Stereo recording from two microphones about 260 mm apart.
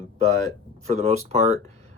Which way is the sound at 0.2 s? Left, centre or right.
Right.